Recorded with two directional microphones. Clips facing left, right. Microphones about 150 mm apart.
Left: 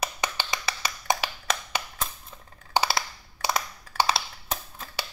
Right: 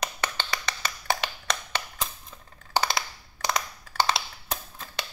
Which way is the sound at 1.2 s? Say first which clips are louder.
Left 1 dB; 5° left (ahead or behind).